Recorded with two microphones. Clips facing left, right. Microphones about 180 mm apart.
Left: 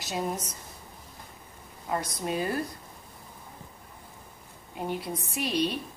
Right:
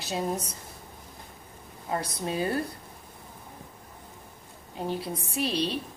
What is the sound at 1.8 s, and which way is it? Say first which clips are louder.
Speech: even; 30° right (ahead or behind).